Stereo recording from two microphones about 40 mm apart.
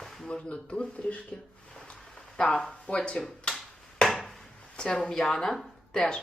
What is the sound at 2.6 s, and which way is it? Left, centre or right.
Speech, left.